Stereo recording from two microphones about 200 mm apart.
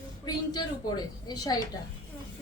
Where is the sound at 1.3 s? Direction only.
20° left (ahead or behind).